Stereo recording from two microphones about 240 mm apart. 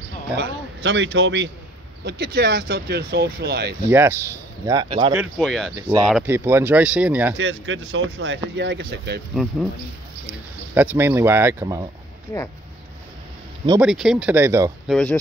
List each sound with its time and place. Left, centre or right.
0.4 s speech: right
3.9 s speech: centre
4.6 s speech: right
5.1 s speech: centre
5.8 s speech: centre
7.3 s speech: right
9.3 s speech: centre
10.7 s speech: centre
13.7 s speech: centre
14.9 s speech: centre